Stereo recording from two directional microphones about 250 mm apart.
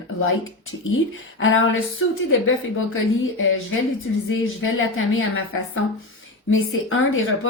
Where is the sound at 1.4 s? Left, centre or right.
Left.